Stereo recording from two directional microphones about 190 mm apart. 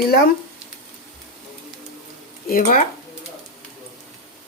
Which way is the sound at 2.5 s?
45° left (ahead or behind).